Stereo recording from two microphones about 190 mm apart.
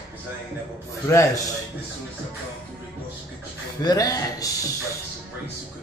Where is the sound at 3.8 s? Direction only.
20° left (ahead or behind).